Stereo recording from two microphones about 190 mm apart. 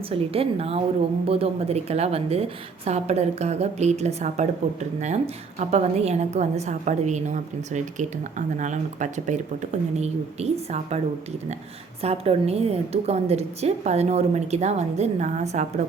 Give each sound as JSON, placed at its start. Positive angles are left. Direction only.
{"t": 0.1, "sound": "a woman's voice", "side_deg": -30}
{"t": 12.0, "sound": "a woman's voice", "side_deg": -30}